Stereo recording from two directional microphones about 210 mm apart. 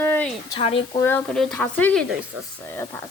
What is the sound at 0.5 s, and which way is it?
Speech, 25° left (ahead or behind).